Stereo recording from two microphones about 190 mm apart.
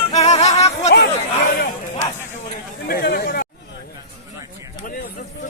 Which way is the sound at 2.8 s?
55° left (ahead or behind).